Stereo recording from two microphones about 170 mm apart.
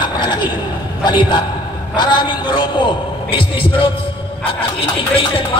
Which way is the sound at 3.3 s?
30° left (ahead or behind).